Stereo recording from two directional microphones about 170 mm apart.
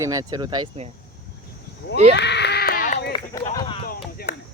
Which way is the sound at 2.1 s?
85° left.